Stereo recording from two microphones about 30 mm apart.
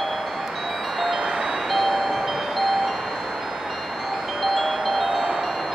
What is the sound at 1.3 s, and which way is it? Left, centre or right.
Music, right.